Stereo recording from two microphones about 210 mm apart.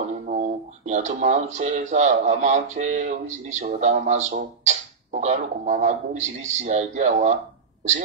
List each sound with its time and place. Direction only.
0.1 s speech: 35° right (ahead or behind)